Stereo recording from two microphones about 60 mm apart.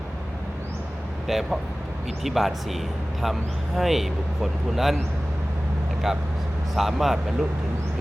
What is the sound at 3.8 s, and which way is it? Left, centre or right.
Speech, centre.